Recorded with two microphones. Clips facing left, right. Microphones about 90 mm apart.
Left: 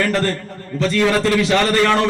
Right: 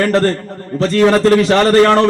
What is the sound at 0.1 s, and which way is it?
A man's voice, 35° right (ahead or behind).